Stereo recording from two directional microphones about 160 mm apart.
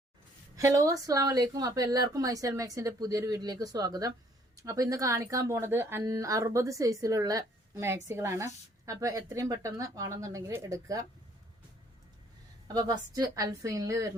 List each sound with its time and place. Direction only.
0.5 s a woman's voice: 20° right (ahead or behind)
12.6 s a woman's voice: 25° right (ahead or behind)